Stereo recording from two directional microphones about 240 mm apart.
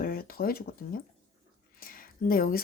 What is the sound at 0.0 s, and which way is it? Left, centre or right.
Speech, left.